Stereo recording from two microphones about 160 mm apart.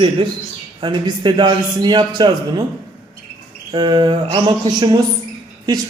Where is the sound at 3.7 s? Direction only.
30° right (ahead or behind).